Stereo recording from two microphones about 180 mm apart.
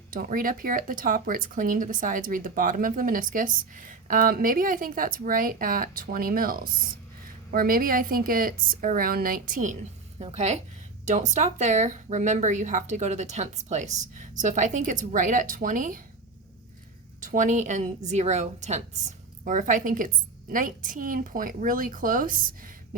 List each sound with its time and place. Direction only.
0.1 s speech: 50° right (ahead or behind)
10.2 s a woman's voice: 35° right (ahead or behind)
17.2 s speech: 45° right (ahead or behind)